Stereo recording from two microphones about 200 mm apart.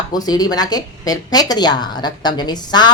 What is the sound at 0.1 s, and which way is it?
A woman's voice, 20° left (ahead or behind).